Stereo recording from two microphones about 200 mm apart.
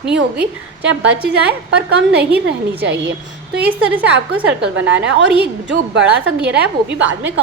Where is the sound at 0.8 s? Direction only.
60° right (ahead or behind).